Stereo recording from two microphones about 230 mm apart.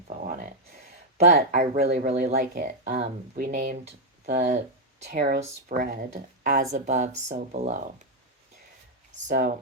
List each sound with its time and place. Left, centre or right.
0.2 s speech: right
9.1 s speech: right